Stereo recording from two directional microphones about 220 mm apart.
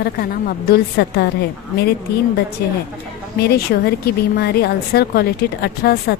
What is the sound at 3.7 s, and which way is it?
A woman's voice, 50° left (ahead or behind).